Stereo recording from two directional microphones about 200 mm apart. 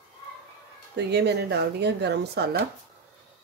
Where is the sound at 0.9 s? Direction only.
55° right (ahead or behind).